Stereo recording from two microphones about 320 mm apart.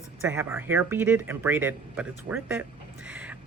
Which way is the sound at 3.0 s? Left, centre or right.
Centre.